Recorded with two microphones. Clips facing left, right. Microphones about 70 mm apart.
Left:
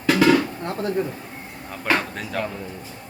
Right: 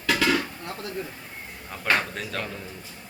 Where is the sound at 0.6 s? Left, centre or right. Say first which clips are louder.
Left 9 dB; left.